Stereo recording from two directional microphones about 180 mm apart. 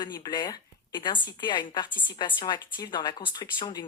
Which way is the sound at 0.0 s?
25° left (ahead or behind).